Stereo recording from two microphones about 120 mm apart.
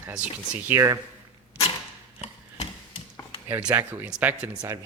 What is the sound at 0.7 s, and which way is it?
Speech, 25° right (ahead or behind).